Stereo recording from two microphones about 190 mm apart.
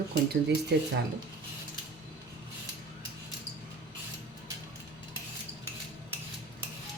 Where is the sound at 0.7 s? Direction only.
60° right (ahead or behind).